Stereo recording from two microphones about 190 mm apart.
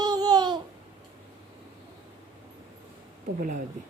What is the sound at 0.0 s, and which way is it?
Babbling, 20° right (ahead or behind).